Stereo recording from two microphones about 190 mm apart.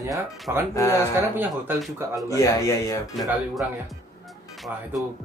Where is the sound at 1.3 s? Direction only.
Centre (ahead or behind).